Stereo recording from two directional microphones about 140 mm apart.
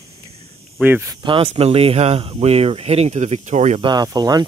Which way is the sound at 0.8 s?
10° right (ahead or behind).